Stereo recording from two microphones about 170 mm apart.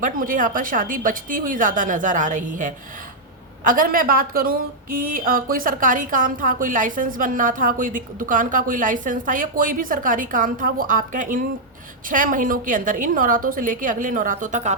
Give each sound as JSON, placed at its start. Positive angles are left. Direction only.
{"t": 0.0, "sound": "a woman's voice", "side_deg": -50}